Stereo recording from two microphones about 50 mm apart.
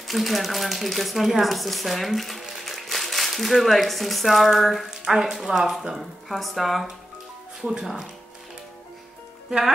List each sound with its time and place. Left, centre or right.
0.0 s speech: centre
7.6 s speech: centre
9.5 s speech: centre